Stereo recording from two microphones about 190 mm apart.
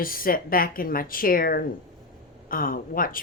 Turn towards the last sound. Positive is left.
turn(degrees=50)  # may be behind; listen again after turning